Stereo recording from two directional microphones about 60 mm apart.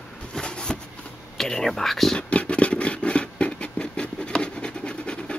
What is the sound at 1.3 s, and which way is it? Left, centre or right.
Speech, centre.